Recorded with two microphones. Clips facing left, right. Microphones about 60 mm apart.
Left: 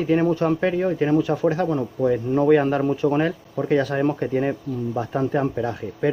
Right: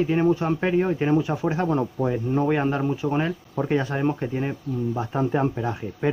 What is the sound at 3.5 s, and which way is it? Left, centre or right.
Speech, centre.